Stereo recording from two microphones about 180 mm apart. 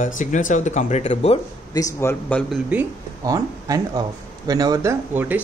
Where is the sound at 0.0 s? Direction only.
45° left (ahead or behind).